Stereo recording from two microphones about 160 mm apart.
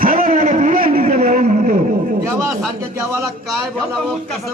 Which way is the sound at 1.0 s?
45° right (ahead or behind).